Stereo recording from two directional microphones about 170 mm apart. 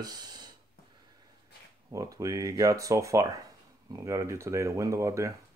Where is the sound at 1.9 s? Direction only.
20° right (ahead or behind).